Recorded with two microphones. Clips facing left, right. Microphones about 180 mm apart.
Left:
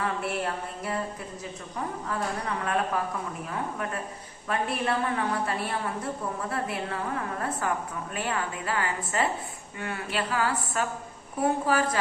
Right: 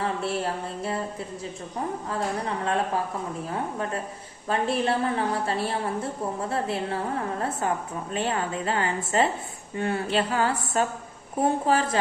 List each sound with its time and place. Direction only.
0.0 s a sound: 30° right (ahead or behind)
2.0 s a woman's voice: 30° right (ahead or behind)
8.1 s a woman's voice: 30° right (ahead or behind)